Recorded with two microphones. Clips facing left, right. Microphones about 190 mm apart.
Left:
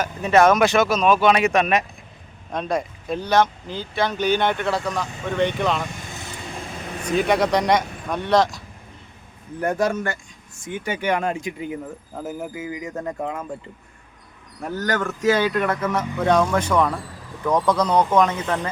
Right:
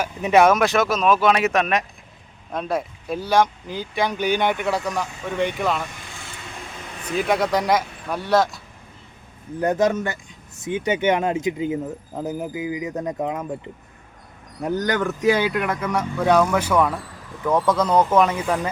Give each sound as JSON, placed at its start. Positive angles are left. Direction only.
{"t": 0.0, "sound": "speech", "side_deg": -10}
{"t": 7.2, "sound": "speech", "side_deg": 0}
{"t": 9.6, "sound": "speech", "side_deg": -20}
{"t": 14.6, "sound": "speech", "side_deg": -15}